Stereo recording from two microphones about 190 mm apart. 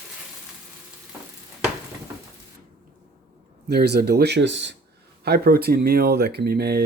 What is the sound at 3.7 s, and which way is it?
Speech, 60° right (ahead or behind).